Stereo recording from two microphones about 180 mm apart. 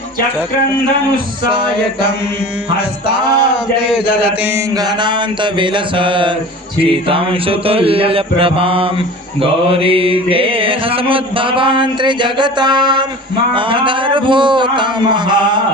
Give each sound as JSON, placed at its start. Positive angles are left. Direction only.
{"t": 4.1, "sound": "mantra", "side_deg": -5}
{"t": 4.8, "sound": "mantra", "side_deg": -25}